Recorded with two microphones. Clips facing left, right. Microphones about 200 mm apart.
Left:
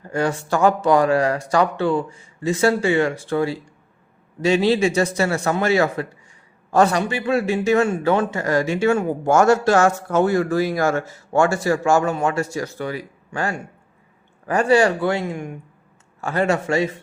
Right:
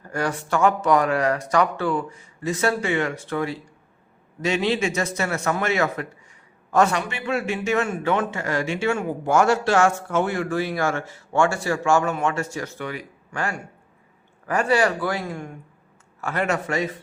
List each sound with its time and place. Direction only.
0.0 s speech: 25° left (ahead or behind)
0.4 s a man's voice: 35° left (ahead or behind); by 15.5 s 20° left (ahead or behind)
16.2 s a man's voice: 30° left (ahead or behind)